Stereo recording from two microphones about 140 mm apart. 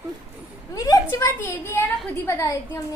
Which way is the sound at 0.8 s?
20° left (ahead or behind).